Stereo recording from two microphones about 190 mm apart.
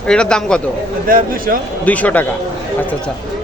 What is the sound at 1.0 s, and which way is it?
Speech, 50° right (ahead or behind).